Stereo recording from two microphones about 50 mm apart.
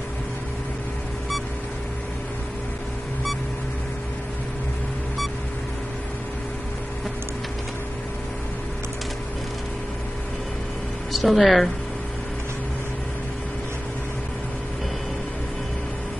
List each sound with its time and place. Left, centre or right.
11.1 s speech: centre